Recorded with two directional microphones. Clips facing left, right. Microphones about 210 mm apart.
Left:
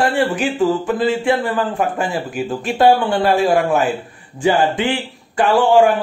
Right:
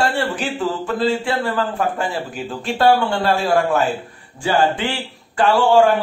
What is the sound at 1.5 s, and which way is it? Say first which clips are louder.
Speech: left 2 dB; 10° left (ahead or behind).